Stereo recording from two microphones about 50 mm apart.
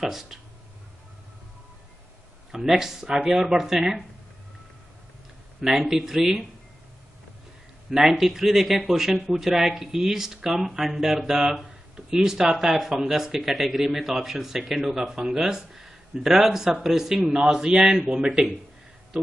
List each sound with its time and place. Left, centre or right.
0.0 s speech: centre
2.8 s speech: centre
5.6 s speech: centre
7.9 s speech: centre